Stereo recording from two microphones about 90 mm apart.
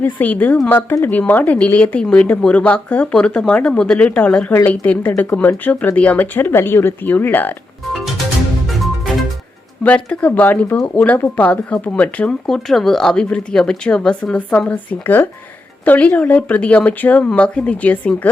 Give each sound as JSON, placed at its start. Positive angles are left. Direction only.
{"t": 0.0, "sound": "speech", "side_deg": 20}
{"t": 8.6, "sound": "music", "side_deg": 0}
{"t": 9.8, "sound": "speech", "side_deg": 15}
{"t": 12.5, "sound": "speech", "side_deg": 5}